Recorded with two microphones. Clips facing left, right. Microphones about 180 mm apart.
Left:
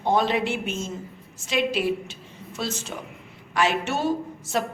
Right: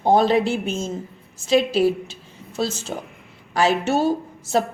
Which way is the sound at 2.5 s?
30° right (ahead or behind).